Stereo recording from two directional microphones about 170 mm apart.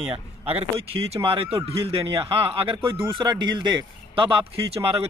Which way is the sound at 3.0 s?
30° right (ahead or behind).